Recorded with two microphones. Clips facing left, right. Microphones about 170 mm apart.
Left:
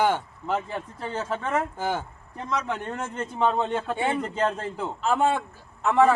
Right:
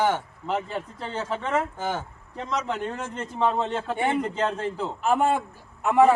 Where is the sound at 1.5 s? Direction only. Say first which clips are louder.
Even; 10° left (ahead or behind).